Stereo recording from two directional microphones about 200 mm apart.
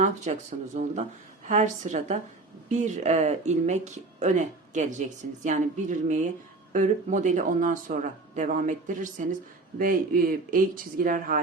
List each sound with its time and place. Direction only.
0.0 s speech: 35° right (ahead or behind)